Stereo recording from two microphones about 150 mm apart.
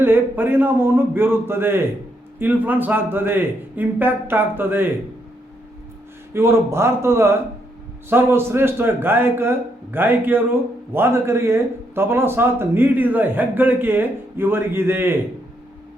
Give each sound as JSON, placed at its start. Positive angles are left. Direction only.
{"t": 0.0, "sound": "a man's voice", "side_deg": -15}
{"t": 6.3, "sound": "a man's voice", "side_deg": -15}